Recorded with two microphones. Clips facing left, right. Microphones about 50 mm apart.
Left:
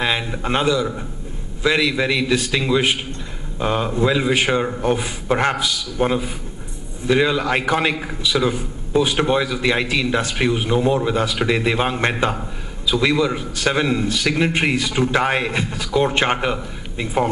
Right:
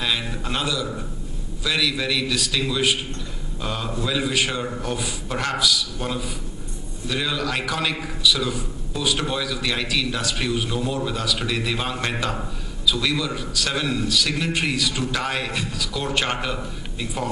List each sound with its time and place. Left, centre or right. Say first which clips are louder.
0.0 s a man's voice: left 4 dB; left